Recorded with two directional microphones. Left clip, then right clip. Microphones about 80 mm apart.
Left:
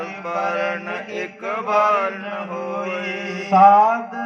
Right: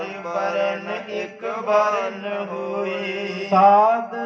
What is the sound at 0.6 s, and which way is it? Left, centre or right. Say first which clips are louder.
Mantra: right 1 dB; right.